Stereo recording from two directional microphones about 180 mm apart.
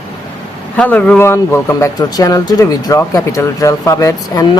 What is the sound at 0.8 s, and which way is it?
Speech, 5° left (ahead or behind).